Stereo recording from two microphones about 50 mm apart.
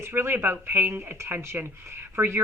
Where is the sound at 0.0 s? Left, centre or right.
Right.